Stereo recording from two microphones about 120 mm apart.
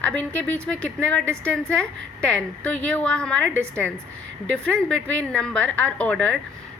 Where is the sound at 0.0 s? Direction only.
10° left (ahead or behind).